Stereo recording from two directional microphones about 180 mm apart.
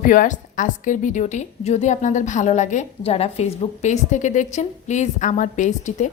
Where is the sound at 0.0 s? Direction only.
50° left (ahead or behind).